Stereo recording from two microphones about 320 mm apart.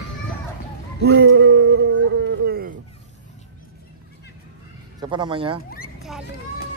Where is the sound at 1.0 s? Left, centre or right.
Right.